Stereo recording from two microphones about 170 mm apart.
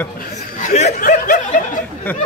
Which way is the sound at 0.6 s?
45° left (ahead or behind).